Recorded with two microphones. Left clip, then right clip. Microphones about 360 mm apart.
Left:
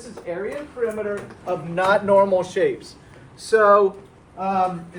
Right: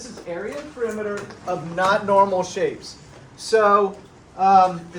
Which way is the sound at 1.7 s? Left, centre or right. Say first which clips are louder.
Left 1 dB; left.